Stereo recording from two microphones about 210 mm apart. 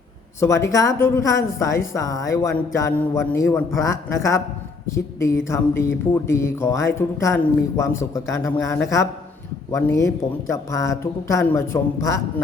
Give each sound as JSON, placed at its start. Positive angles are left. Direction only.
{"t": 0.3, "sound": "a man's voice", "side_deg": 15}